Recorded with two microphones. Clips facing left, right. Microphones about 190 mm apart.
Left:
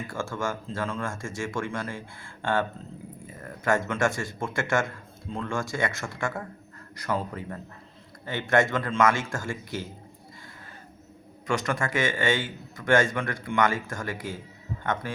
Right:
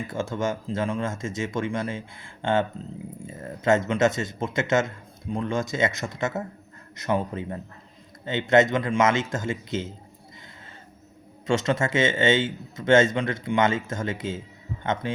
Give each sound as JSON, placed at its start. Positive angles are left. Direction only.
{"t": 0.1, "sound": "a man's voice", "side_deg": -20}
{"t": 11.4, "sound": "a man's voice", "side_deg": -25}